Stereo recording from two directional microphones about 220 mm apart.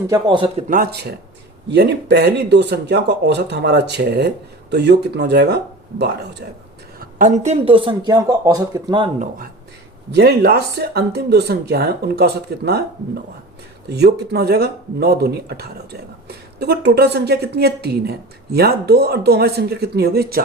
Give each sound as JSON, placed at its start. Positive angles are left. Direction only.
{"t": 0.1, "sound": "speech", "side_deg": -20}
{"t": 0.7, "sound": "speech", "side_deg": -45}
{"t": 7.0, "sound": "speech", "side_deg": -35}
{"t": 10.1, "sound": "speech", "side_deg": -50}
{"t": 13.8, "sound": "speech", "side_deg": -50}